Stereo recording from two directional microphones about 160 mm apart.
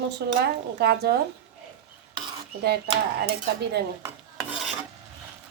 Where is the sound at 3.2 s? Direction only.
90° right.